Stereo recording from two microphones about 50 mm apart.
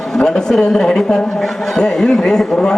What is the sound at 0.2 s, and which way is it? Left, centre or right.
A man's voice, centre.